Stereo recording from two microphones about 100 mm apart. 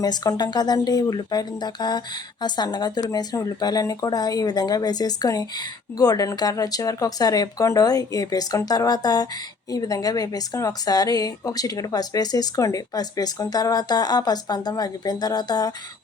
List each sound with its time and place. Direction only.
0.0 s speech: 40° left (ahead or behind)